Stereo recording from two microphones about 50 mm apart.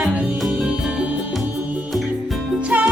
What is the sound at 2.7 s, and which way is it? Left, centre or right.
Music, right.